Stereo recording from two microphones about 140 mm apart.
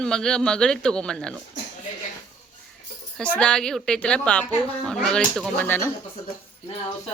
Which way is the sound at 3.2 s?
10° left (ahead or behind).